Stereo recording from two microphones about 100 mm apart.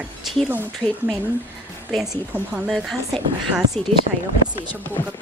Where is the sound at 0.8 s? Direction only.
15° left (ahead or behind).